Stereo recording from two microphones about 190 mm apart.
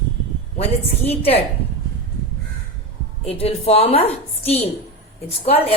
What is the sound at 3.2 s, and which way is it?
A woman's voice, 30° left (ahead or behind).